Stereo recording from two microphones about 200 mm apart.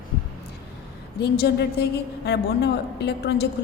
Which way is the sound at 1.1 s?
55° left (ahead or behind).